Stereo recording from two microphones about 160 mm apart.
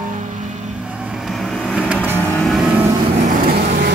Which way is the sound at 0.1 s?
55° right (ahead or behind).